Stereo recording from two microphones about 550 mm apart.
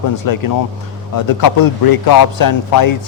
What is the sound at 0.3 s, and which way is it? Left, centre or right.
Speech, left.